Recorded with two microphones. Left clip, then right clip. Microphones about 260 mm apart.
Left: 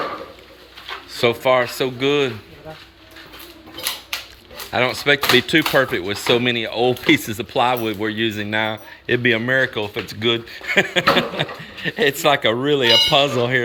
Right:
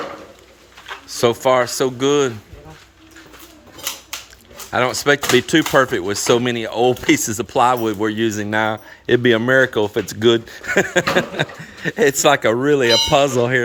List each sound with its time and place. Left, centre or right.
1.2 s a man's voice: centre
4.7 s a man's voice: centre; by 10.4 s right
10.6 s a man's voice: centre